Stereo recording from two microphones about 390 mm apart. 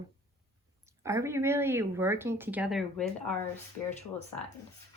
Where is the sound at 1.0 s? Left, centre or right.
Centre.